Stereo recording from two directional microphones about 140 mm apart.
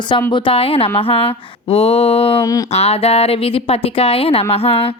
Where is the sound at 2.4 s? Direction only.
25° left (ahead or behind).